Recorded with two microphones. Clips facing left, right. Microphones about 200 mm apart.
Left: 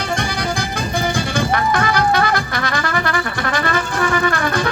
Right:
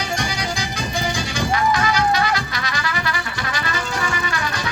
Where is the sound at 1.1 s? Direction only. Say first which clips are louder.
Left 4 dB; 55° left (ahead or behind).